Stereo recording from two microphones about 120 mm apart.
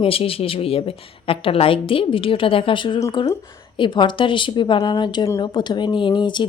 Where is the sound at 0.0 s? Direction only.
50° left (ahead or behind).